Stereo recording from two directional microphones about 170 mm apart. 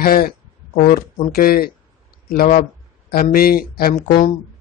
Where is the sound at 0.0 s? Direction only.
60° left (ahead or behind).